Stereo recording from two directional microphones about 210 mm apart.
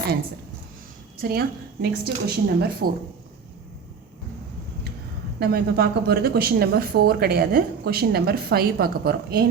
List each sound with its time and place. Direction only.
1.2 s speech: 45° right (ahead or behind)
5.4 s speech: 50° right (ahead or behind)